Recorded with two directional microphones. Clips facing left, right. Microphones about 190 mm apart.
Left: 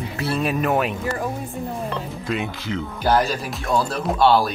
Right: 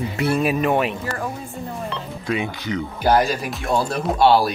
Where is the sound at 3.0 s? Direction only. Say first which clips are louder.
Right 2 dB; 10° right (ahead or behind).